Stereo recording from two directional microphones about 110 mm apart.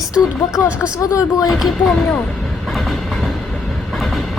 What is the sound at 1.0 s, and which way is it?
Speech, 30° left (ahead or behind).